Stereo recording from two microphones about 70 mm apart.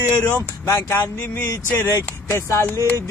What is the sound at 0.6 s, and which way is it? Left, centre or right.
A man's voice, left.